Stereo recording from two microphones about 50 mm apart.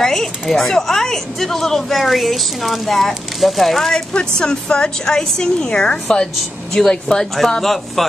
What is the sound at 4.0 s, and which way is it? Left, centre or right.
A woman's voice, centre.